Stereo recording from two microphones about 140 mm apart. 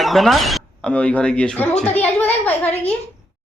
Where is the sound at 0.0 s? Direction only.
Centre (ahead or behind).